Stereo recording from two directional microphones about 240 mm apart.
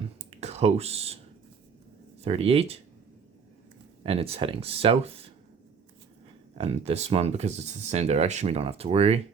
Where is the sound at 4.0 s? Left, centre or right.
Right.